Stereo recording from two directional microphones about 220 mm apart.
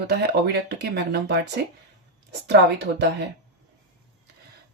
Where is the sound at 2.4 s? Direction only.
50° right (ahead or behind).